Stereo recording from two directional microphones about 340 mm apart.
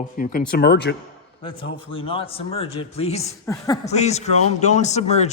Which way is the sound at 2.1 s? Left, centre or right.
Centre.